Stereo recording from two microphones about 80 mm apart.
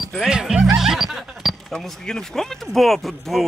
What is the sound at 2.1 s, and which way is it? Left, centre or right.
Speech, centre.